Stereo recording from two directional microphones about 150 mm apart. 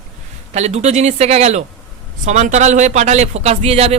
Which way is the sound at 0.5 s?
50° right (ahead or behind).